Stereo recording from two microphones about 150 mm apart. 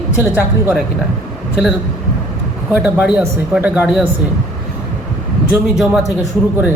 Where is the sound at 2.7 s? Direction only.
10° right (ahead or behind).